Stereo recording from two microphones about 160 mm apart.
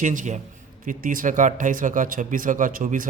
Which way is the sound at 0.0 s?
50° right (ahead or behind).